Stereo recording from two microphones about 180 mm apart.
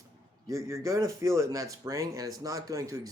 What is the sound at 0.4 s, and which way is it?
Speech, 15° right (ahead or behind).